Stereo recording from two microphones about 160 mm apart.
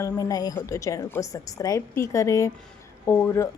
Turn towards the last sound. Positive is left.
turn(degrees=20)  # may be behind; listen again after turning